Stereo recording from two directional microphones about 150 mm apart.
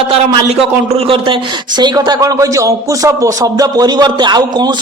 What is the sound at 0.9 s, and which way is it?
A man's voice, 35° right (ahead or behind).